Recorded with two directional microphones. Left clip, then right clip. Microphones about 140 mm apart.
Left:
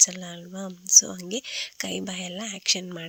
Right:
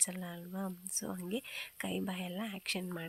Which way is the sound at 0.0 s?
30° left (ahead or behind).